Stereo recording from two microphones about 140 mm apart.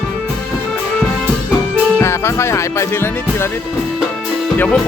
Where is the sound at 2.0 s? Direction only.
20° left (ahead or behind).